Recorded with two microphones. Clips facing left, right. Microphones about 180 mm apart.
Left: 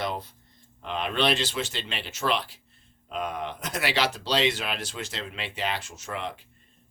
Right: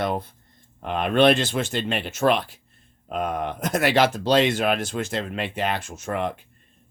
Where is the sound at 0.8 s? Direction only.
50° right (ahead or behind).